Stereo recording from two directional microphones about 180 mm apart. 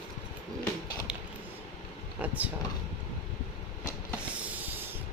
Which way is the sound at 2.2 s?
10° right (ahead or behind).